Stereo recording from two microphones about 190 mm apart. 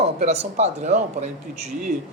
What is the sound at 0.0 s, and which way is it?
Speech, 35° right (ahead or behind).